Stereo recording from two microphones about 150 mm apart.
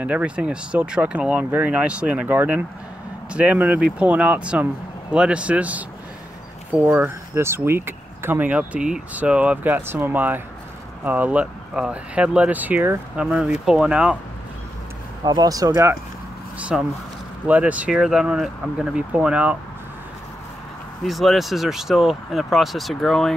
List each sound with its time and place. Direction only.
0.0 s speech: 10° right (ahead or behind)
15.2 s speech: 25° right (ahead or behind)
16.5 s speech: 10° right (ahead or behind)
21.0 s speech: centre (ahead or behind)